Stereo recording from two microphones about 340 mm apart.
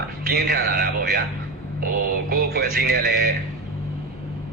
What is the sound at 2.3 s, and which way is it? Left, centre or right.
Music, right.